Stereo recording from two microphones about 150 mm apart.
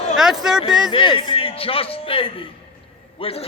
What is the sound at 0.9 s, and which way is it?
A man's voice, 35° left (ahead or behind).